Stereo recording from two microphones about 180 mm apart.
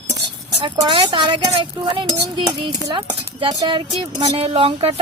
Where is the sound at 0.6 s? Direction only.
25° right (ahead or behind).